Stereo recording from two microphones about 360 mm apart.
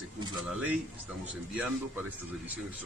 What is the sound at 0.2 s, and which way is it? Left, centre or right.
Speech, centre.